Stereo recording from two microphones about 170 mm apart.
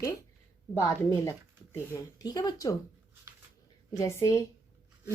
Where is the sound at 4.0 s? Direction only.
15° left (ahead or behind).